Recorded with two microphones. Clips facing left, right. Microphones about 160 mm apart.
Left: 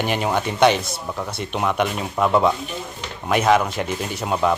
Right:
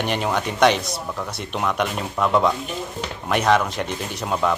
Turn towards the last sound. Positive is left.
turn(degrees=5)  # may be behind; listen again after turning